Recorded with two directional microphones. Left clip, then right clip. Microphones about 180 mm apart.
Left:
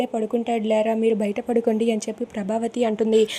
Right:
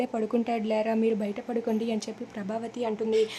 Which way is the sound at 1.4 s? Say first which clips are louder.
Left 11 dB; 25° left (ahead or behind).